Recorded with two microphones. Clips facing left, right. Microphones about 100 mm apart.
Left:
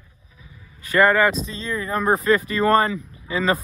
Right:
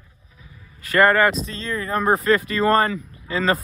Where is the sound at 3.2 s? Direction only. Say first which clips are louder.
Even; 15° left (ahead or behind).